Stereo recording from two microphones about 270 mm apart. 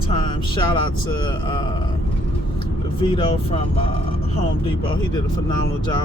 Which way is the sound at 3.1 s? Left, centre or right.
Centre.